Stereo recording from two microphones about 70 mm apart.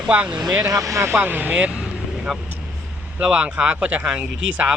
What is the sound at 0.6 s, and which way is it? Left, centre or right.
Speech, right.